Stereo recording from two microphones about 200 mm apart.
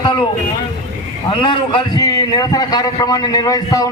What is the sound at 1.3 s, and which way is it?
A man's voice, 25° left (ahead or behind).